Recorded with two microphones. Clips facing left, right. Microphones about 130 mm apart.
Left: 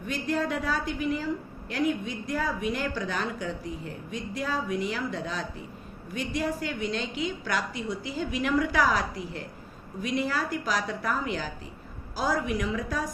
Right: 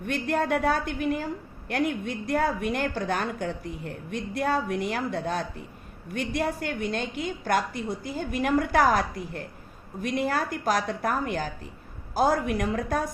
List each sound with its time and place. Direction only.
0.0 s a woman's voice: 60° right (ahead or behind)